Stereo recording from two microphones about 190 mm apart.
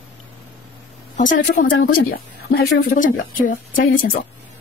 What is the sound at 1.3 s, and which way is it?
Speech, 55° left (ahead or behind).